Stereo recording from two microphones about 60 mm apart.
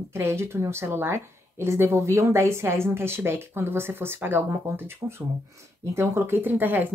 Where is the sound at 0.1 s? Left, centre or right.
Right.